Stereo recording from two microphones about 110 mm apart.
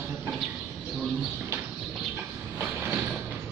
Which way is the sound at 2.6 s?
15° right (ahead or behind).